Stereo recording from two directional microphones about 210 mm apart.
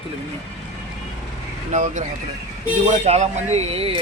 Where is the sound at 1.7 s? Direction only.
35° right (ahead or behind).